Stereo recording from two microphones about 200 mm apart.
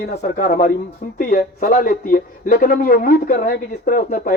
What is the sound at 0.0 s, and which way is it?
Speech, 50° left (ahead or behind).